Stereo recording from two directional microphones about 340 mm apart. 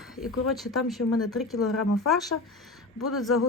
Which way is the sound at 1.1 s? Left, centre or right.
Left.